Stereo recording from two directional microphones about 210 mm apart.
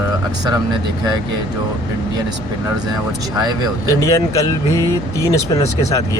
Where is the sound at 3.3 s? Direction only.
20° right (ahead or behind).